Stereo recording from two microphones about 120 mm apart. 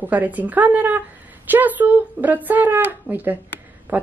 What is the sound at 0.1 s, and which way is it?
Speech, 15° right (ahead or behind).